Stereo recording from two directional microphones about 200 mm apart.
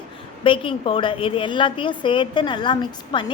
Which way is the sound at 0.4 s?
25° left (ahead or behind).